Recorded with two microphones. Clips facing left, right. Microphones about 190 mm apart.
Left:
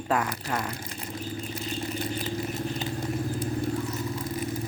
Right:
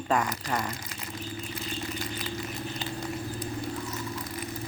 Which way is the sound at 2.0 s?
30° left (ahead or behind).